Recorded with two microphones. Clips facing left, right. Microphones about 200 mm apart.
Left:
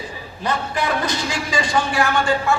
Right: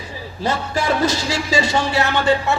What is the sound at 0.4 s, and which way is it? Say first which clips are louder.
Speech: right 2 dB; 30° right (ahead or behind).